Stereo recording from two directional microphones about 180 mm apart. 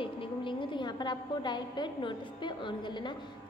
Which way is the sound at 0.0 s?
25° left (ahead or behind).